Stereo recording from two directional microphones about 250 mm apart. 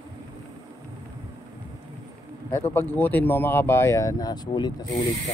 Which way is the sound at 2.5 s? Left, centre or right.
Centre.